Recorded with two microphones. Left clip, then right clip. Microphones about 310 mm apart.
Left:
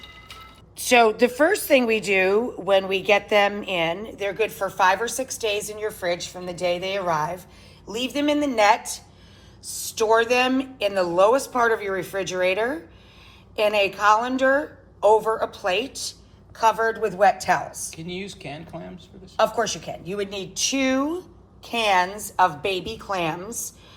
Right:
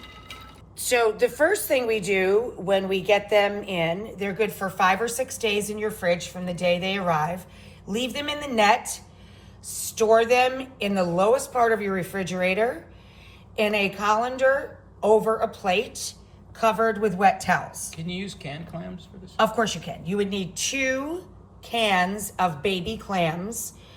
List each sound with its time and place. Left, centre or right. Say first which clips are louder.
0.8 s a woman's voice: left 4 dB; left
19.4 s a woman's voice: left 1 dB; centre